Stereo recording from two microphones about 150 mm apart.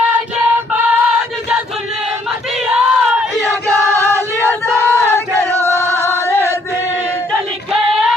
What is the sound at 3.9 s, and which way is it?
Choir, 20° right (ahead or behind).